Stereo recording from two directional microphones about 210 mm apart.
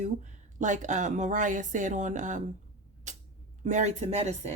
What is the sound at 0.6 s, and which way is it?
A woman's voice, 35° right (ahead or behind).